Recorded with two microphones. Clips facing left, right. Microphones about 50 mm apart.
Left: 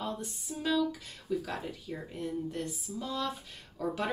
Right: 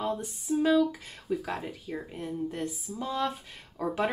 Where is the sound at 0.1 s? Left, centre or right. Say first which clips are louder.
Right 9 dB; right.